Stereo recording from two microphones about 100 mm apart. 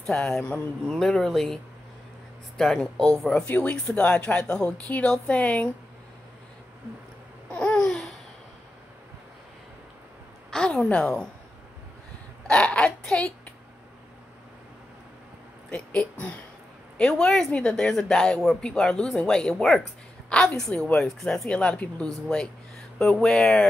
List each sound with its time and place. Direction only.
0.0 s a woman's voice: 5° left (ahead or behind)
0.8 s a woman's voice: 5° left (ahead or behind)
7.5 s babbling: 10° left (ahead or behind)
10.5 s a sound: 5° left (ahead or behind)
12.4 s a sound: 10° left (ahead or behind)
15.7 s a woman's voice: 10° left (ahead or behind)